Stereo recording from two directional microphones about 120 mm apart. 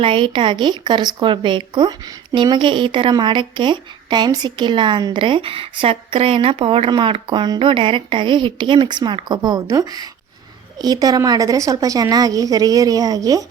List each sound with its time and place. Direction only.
0.0 s a woman's voice: 45° right (ahead or behind)